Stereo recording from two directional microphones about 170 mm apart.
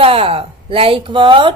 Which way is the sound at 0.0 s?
35° right (ahead or behind).